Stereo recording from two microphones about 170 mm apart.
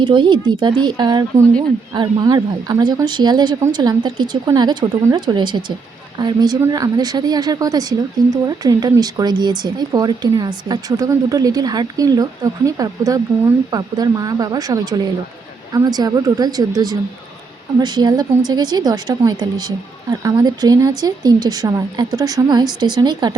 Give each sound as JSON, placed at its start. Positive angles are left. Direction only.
{"t": 0.0, "sound": "speech", "side_deg": -30}